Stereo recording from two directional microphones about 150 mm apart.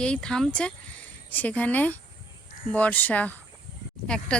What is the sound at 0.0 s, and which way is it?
Speech, 5° left (ahead or behind).